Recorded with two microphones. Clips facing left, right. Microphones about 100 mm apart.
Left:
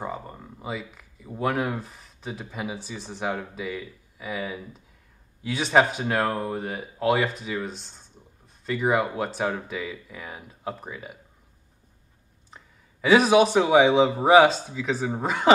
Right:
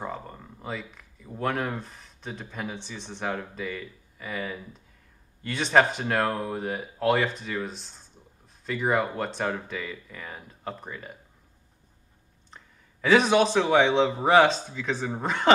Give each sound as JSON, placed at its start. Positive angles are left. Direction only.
{"t": 0.0, "sound": "a man's voice", "side_deg": 5}
{"t": 12.4, "sound": "a man's voice", "side_deg": 5}